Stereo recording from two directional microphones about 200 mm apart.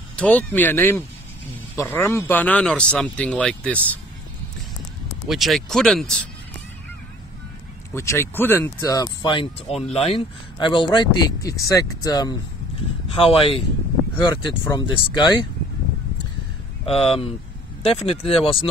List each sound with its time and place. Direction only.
0.1 s speech: 5° left (ahead or behind)
5.3 s speech: centre (ahead or behind)
7.9 s speech: 15° left (ahead or behind)
9.7 s speech: centre (ahead or behind)
9.9 s speech: 30° left (ahead or behind)
17.0 s speech: 30° left (ahead or behind)